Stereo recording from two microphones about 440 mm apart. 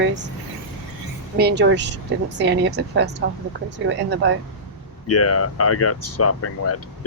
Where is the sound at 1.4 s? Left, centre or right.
Right.